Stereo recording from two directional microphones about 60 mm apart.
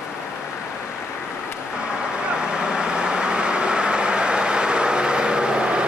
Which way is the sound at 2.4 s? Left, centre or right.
Centre.